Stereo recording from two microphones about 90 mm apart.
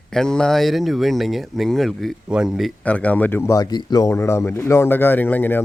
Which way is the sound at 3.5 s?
50° left (ahead or behind).